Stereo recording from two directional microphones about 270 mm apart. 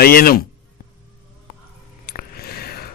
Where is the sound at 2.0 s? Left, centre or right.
Left.